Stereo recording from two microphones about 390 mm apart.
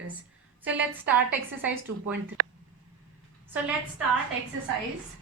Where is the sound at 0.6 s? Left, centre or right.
Centre.